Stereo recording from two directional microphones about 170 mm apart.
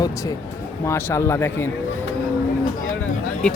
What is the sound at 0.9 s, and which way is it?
Speech, 15° left (ahead or behind).